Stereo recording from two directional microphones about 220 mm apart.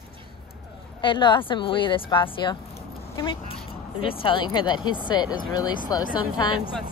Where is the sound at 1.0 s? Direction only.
20° left (ahead or behind).